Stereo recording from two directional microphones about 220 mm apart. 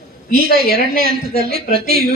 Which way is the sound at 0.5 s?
45° right (ahead or behind).